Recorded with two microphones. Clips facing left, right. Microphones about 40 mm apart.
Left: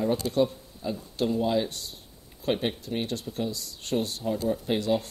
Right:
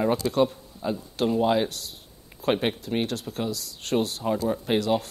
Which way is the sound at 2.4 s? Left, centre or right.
Right.